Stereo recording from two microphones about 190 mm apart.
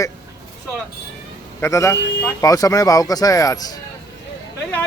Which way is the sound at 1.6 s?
15° left (ahead or behind).